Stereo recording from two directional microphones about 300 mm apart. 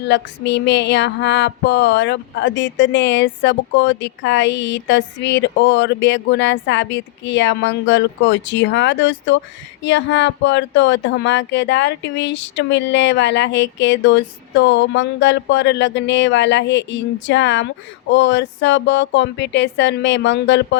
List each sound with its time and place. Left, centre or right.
0.0 s female singing: left